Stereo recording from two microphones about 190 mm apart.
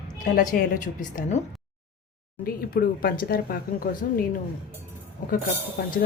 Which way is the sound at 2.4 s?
50° left (ahead or behind).